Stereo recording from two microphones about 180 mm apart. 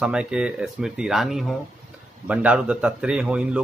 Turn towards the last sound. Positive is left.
turn(degrees=-5)  # may be behind; listen again after turning